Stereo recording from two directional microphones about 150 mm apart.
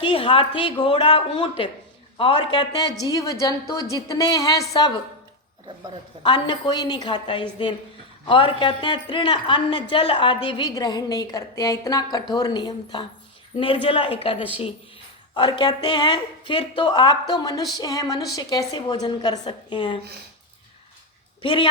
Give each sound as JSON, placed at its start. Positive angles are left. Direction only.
{"t": 0.0, "sound": "a woman's voice", "side_deg": 35}
{"t": 6.2, "sound": "a woman's voice", "side_deg": 30}
{"t": 15.4, "sound": "a woman's voice", "side_deg": 30}
{"t": 21.4, "sound": "a woman's voice", "side_deg": 30}